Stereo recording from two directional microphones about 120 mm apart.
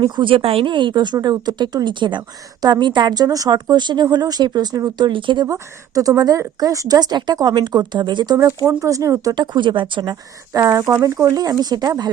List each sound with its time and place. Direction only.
0.0 s speech: 45° right (ahead or behind)
5.5 s speech: 30° right (ahead or behind)
8.6 s speech: 25° right (ahead or behind)
9.3 s speech: 40° right (ahead or behind)